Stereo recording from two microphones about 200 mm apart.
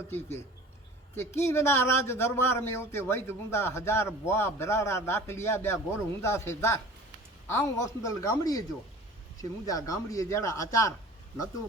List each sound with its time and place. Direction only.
0.1 s a man's voice: 10° left (ahead or behind)